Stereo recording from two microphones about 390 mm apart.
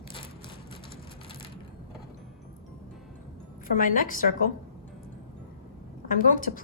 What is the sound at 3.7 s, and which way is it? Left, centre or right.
Speech, left.